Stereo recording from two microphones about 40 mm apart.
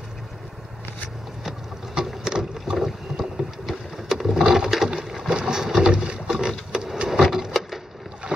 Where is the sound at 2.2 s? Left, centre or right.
Centre.